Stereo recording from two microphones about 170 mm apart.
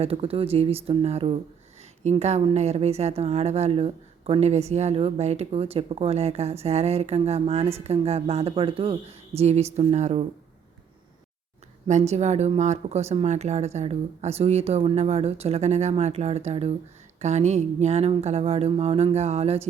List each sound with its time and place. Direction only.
0.0 s speech: 35° right (ahead or behind)
11.9 s speech: 40° right (ahead or behind)